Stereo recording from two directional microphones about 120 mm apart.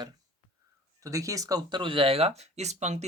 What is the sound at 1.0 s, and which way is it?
Speech, 30° right (ahead or behind).